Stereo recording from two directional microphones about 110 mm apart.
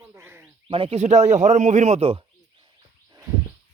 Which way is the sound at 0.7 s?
60° right (ahead or behind).